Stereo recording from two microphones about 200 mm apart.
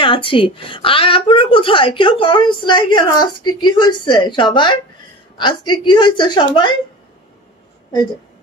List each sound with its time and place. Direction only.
0.0 s a woman's voice: 25° left (ahead or behind)